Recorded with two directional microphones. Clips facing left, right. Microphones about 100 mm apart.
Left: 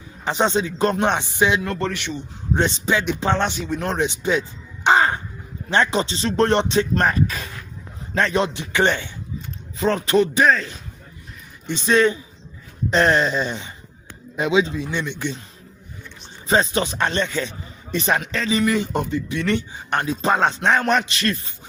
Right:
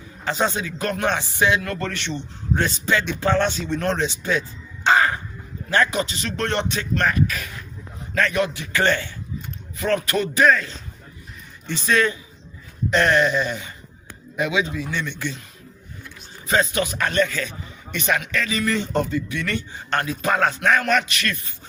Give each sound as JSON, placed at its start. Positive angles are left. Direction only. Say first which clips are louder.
{"t": 0.3, "sound": "speech", "louder": "left 3 dB", "side_deg": 20}
{"t": 2.6, "sound": "speech", "louder": "left 2 dB", "side_deg": 20}
{"t": 16.5, "sound": "speech", "louder": "left 2 dB", "side_deg": 30}
{"t": 18.6, "sound": "speech", "louder": "left 2 dB", "side_deg": 10}